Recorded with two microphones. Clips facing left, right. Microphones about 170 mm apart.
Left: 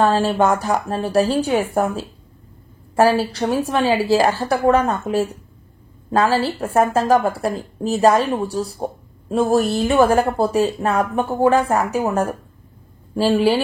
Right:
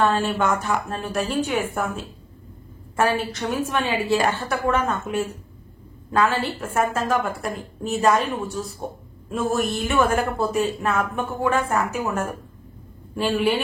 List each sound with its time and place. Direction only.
0.0 s speech: 35° left (ahead or behind)